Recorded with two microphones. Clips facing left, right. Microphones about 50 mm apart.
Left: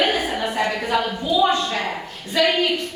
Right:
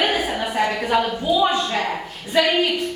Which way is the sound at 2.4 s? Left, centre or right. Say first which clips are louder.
Right 1 dB; centre.